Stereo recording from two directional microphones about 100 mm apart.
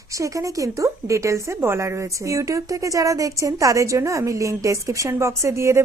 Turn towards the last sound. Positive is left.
turn(degrees=-30)  # may be behind; listen again after turning